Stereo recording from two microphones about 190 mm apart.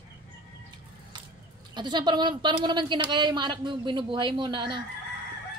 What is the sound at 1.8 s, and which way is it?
Speech, 25° right (ahead or behind).